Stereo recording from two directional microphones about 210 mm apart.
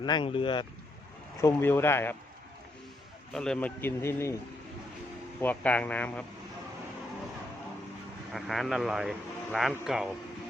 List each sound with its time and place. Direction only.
0.0 s speech: 20° left (ahead or behind)
1.4 s speech: 10° left (ahead or behind)
3.3 s speech: 5° left (ahead or behind)
5.4 s speech: 5° left (ahead or behind)
8.3 s a man's voice: centre (ahead or behind)